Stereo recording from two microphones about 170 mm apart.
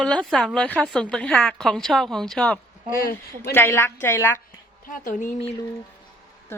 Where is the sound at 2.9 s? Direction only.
60° left (ahead or behind).